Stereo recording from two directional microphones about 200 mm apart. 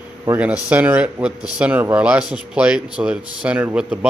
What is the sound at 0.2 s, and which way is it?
A man's voice, 10° right (ahead or behind).